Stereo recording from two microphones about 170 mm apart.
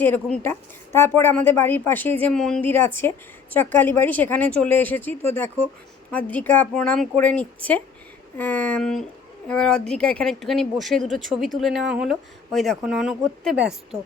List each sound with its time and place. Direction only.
0.0 s speech: 10° left (ahead or behind)